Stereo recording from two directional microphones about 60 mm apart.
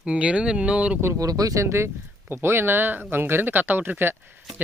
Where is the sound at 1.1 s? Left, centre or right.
Right.